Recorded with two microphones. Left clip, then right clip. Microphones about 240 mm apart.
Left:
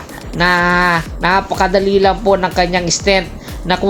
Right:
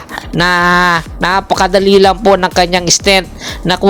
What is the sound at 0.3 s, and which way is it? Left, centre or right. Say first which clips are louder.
Speech: right 3 dB; right.